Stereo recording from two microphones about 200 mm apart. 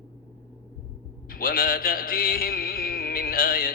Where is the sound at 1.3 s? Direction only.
45° left (ahead or behind).